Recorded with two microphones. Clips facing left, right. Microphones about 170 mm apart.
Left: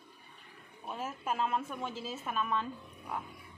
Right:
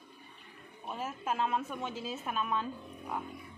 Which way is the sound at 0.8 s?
Centre (ahead or behind).